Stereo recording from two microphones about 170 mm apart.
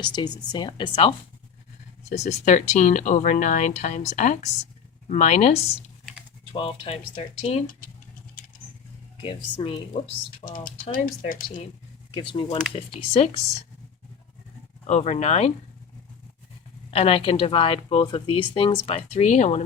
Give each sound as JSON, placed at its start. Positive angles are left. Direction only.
{"t": 0.0, "sound": "speech", "side_deg": 25}
{"t": 2.1, "sound": "a woman's voice", "side_deg": 45}
{"t": 8.4, "sound": "vehicle", "side_deg": 55}
{"t": 9.6, "sound": "a woman's voice", "side_deg": 30}
{"t": 10.4, "sound": "speech", "side_deg": 55}
{"t": 12.1, "sound": "a woman's voice", "side_deg": 30}
{"t": 14.8, "sound": "a woman's voice", "side_deg": 40}
{"t": 16.9, "sound": "a woman's voice", "side_deg": 35}